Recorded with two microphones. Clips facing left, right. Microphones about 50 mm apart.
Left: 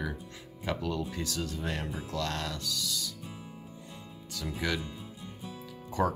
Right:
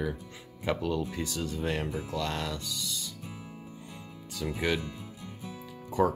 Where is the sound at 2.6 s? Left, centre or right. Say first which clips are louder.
Left 2 dB; right.